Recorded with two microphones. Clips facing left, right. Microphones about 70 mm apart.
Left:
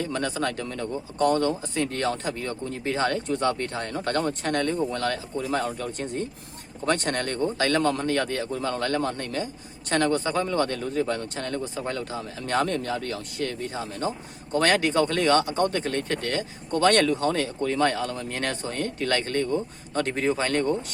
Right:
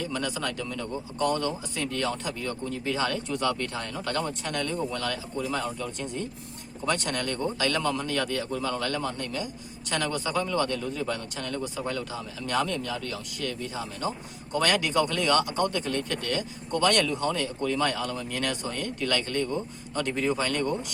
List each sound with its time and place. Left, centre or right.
0.0 s speech: left